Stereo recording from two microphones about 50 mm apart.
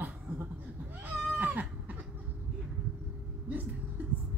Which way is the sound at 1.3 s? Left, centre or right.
Right.